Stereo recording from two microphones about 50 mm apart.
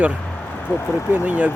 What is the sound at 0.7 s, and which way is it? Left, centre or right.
Speech, left.